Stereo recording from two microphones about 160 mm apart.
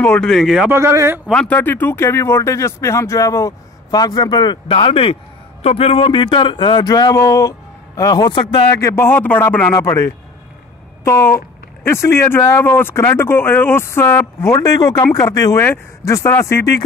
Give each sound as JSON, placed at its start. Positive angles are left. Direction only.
{"t": 0.0, "sound": "a man's voice", "side_deg": 5}
{"t": 0.7, "sound": "a man's voice", "side_deg": -15}
{"t": 1.2, "sound": "speech", "side_deg": 5}
{"t": 8.8, "sound": "speech", "side_deg": 15}
{"t": 11.1, "sound": "speech", "side_deg": 15}